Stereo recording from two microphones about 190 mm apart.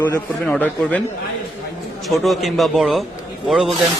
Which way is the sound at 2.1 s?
Centre (ahead or behind).